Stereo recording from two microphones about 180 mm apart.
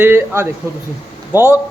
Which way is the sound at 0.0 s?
10° right (ahead or behind).